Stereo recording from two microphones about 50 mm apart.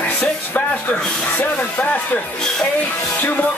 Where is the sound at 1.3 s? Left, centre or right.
Left.